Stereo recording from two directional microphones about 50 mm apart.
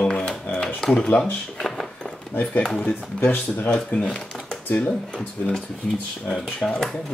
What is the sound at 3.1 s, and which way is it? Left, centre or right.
Speech, left.